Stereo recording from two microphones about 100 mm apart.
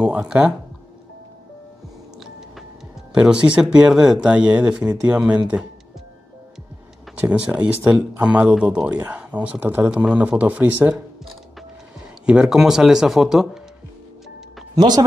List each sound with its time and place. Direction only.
0.0 s speech: 10° right (ahead or behind)
3.1 s speech: 10° right (ahead or behind)
7.2 s speech: 15° right (ahead or behind)
12.3 s speech: 5° right (ahead or behind)
14.8 s speech: 45° right (ahead or behind)